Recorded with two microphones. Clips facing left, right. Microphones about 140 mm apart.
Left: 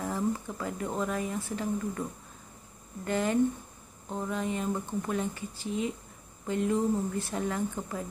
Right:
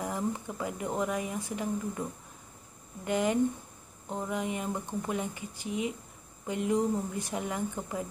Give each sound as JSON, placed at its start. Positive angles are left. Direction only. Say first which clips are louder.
{"t": 0.0, "sound": "speech", "louder": "left 2 dB", "side_deg": -15}
{"t": 3.1, "sound": "speech", "louder": "even", "side_deg": -15}